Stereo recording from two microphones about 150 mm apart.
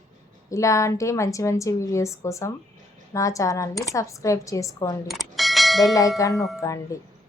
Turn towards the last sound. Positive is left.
turn(degrees=20)  # may be behind; listen again after turning